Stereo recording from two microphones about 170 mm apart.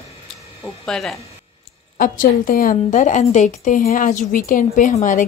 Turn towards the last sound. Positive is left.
turn(degrees=50)  # may be behind; listen again after turning